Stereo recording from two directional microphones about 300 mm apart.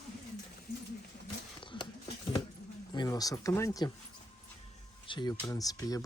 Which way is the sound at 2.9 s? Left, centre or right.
Centre.